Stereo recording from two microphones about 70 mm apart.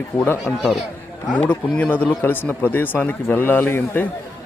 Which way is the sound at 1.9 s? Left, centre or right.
Left.